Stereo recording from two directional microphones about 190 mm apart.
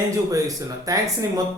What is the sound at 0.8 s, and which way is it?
Speech, 20° right (ahead or behind).